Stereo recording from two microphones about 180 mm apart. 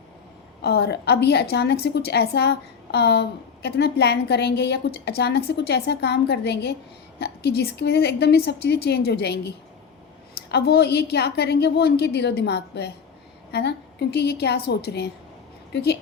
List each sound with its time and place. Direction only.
0.6 s a woman's voice: 65° left (ahead or behind)